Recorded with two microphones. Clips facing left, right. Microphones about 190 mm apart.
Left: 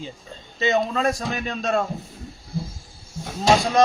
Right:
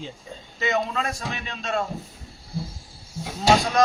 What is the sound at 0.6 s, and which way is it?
A man's voice, 30° left (ahead or behind).